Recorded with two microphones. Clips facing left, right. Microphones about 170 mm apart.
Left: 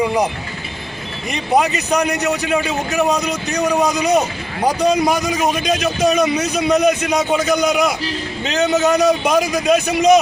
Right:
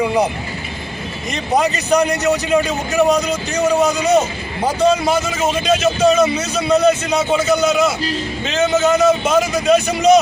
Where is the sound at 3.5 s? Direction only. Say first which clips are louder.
Right 1 dB; 15° left (ahead or behind).